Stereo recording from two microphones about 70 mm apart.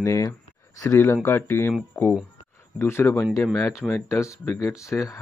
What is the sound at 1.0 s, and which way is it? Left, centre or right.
Speech, left.